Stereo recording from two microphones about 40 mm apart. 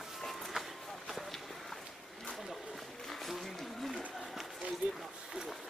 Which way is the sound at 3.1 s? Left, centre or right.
Centre.